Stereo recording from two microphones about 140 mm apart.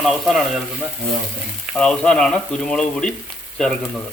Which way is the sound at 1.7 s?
5° left (ahead or behind).